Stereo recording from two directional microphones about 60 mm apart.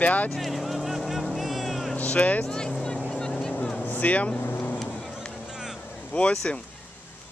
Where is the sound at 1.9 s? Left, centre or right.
Left.